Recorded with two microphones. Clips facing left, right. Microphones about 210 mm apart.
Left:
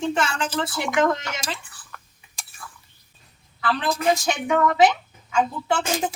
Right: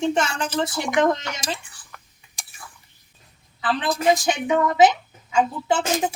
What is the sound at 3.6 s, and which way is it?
Speech, 20° right (ahead or behind).